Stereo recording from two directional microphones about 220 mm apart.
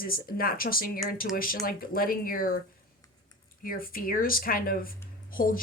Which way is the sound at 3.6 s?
40° left (ahead or behind).